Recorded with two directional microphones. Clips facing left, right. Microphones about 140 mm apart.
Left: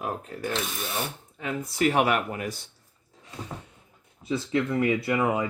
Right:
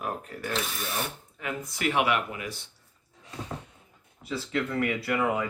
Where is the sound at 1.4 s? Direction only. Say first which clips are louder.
Left 5 dB; 35° left (ahead or behind).